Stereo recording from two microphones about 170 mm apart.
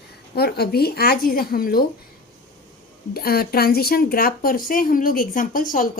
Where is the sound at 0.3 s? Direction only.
70° left (ahead or behind).